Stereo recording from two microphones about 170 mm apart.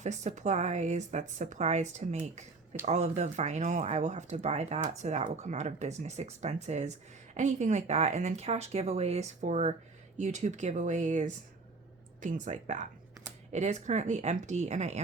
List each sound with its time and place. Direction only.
0.0 s a woman's voice: 45° right (ahead or behind)